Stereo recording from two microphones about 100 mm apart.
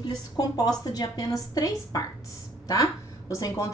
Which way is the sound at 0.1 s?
40° left (ahead or behind).